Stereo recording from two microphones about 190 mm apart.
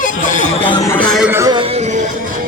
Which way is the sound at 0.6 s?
25° left (ahead or behind).